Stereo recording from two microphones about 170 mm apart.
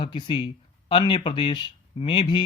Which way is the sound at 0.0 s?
30° left (ahead or behind).